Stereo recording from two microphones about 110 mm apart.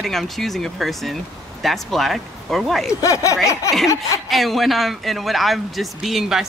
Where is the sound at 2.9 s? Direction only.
30° left (ahead or behind).